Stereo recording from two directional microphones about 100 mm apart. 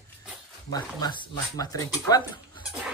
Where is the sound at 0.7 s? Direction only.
45° left (ahead or behind).